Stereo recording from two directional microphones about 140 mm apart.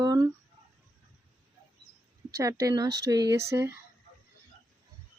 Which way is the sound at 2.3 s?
20° right (ahead or behind).